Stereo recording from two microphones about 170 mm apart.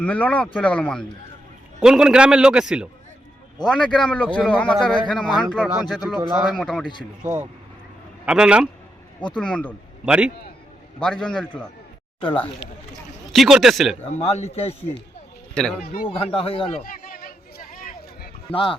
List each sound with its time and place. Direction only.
0.0 s a man's voice: 10° left (ahead or behind)
3.7 s a man's voice: 5° left (ahead or behind)
7.2 s a man's voice: 10° right (ahead or behind)
9.3 s speech: 5° left (ahead or behind)
10.1 s a man's voice: 5° right (ahead or behind)
11.0 s a man's voice: 5° left (ahead or behind)
12.2 s speech: 30° left (ahead or behind)
13.3 s a man's voice: centre (ahead or behind)
14.0 s speech: 40° left (ahead or behind)
15.5 s a man's voice: 5° left (ahead or behind)
15.8 s speech: 60° left (ahead or behind)
16.0 s speech: 35° left (ahead or behind)
16.8 s a sound: 55° left (ahead or behind)
18.5 s speech: 30° left (ahead or behind)